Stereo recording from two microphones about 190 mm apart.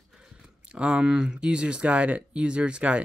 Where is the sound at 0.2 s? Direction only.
5° right (ahead or behind).